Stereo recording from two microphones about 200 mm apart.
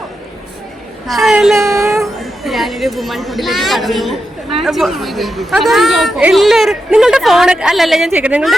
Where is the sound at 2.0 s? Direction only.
Centre (ahead or behind).